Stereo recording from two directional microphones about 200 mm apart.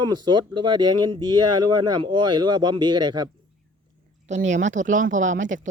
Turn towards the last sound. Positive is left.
turn(degrees=-40)  # may be behind; listen again after turning